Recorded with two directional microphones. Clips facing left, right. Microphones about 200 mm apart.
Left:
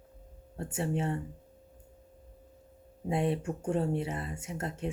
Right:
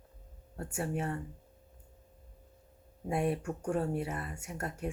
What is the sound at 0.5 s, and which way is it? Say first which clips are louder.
Speech: left 3 dB; 25° left (ahead or behind).